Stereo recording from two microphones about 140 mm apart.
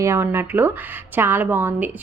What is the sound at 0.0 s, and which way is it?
A woman's voice, 15° right (ahead or behind).